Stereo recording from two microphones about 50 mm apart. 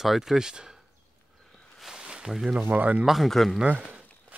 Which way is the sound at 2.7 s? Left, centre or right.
Right.